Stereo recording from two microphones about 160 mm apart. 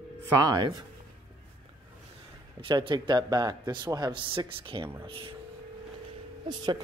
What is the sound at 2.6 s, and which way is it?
A man's voice, 30° right (ahead or behind).